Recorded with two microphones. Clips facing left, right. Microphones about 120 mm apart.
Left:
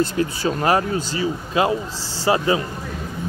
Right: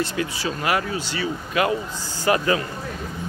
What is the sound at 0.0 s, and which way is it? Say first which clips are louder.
Speech: left 5 dB; 40° left (ahead or behind).